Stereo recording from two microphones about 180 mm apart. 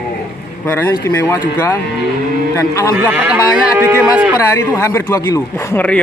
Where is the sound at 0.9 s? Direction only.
15° left (ahead or behind).